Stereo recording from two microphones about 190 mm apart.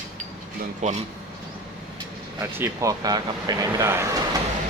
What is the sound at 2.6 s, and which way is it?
Speech, 15° right (ahead or behind).